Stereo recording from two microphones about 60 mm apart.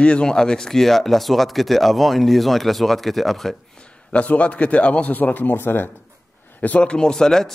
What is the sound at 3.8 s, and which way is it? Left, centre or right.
A man's voice, left.